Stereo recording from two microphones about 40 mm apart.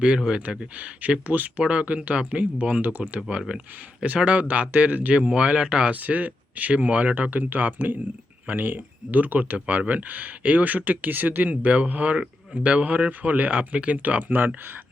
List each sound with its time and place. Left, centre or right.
0.2 s speech: centre
0.8 s speech: right
3.2 s speech: right
5.1 s speech: right
5.9 s speech: right
7.3 s speech: right